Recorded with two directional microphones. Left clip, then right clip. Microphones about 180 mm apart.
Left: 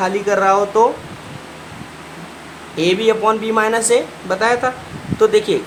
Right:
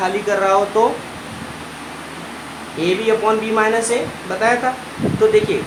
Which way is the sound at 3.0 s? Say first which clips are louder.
Even; 30° left (ahead or behind).